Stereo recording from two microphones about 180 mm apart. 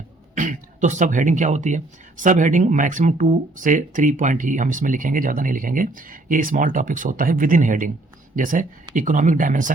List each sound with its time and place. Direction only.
0.3 s speech: 45° right (ahead or behind)